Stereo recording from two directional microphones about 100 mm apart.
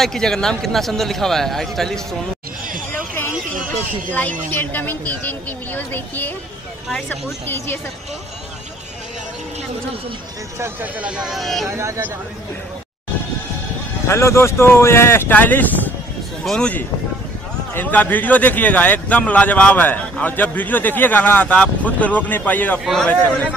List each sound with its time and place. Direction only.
0.0 s a man's voice: 5° left (ahead or behind)
4.1 s a man's voice: 20° left (ahead or behind)
7.4 s speech: 25° left (ahead or behind)
10.6 s speech: 15° right (ahead or behind); by 11.7 s centre (ahead or behind)
11.7 s speech: 30° right (ahead or behind)
14.0 s a man's voice: 30° left (ahead or behind)